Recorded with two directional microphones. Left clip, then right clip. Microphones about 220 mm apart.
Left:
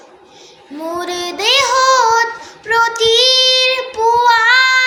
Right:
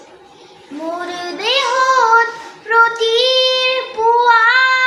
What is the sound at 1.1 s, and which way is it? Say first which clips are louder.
Child singing: left 4 dB; 50° left (ahead or behind).